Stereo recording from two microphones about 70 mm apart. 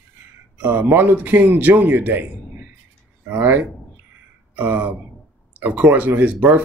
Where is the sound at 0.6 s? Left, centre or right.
Right.